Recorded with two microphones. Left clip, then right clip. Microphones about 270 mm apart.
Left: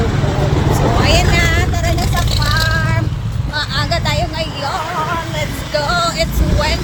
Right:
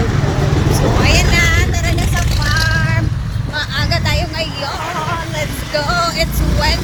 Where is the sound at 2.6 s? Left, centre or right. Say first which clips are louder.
Even; centre.